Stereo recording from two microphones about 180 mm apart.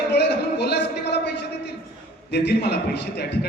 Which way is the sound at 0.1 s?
65° left (ahead or behind).